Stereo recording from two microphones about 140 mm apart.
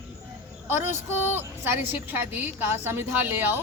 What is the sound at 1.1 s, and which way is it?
A woman's voice, 15° right (ahead or behind).